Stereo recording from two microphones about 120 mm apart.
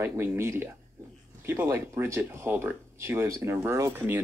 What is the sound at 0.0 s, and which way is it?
Speech, 20° right (ahead or behind).